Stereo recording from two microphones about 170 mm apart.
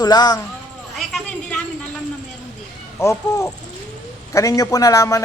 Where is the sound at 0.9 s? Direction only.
5° left (ahead or behind).